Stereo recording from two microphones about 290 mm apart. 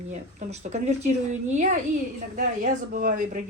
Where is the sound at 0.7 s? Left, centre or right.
Right.